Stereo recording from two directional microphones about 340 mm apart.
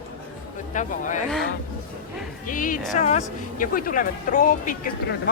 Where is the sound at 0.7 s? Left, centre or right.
Left.